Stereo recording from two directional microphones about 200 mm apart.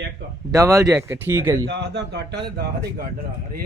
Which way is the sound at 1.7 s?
60° right (ahead or behind).